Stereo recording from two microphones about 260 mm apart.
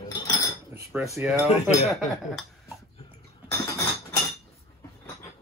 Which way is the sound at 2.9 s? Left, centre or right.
Centre.